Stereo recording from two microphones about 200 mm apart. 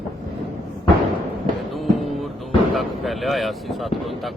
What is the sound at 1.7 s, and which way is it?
Music, centre (ahead or behind).